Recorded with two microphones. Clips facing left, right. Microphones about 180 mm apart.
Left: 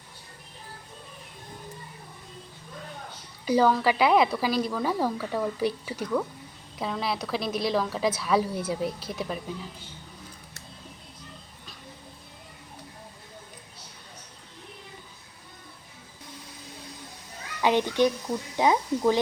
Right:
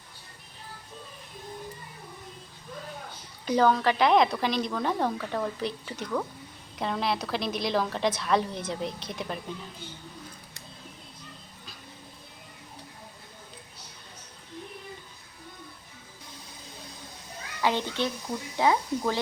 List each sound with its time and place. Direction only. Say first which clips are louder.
3.4 s a woman's voice: left 1 dB; 5° left (ahead or behind)
17.6 s speech: left 5 dB; 15° left (ahead or behind)